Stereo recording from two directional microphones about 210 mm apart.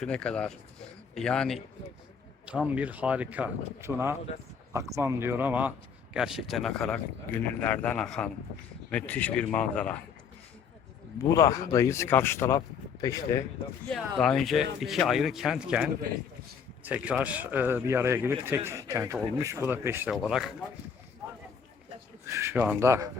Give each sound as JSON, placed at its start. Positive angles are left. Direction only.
{"t": 0.0, "sound": "a man's voice", "side_deg": 5}
{"t": 11.2, "sound": "speech", "side_deg": 15}
{"t": 13.9, "sound": "a man's voice", "side_deg": 0}
{"t": 22.3, "sound": "speech", "side_deg": -10}